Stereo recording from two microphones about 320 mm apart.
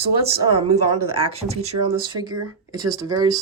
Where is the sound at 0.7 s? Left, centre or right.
Right.